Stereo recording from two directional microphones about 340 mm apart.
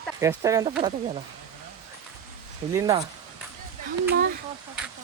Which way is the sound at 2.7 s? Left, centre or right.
Centre.